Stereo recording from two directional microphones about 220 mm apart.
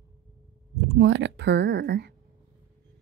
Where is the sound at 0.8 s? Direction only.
55° right (ahead or behind).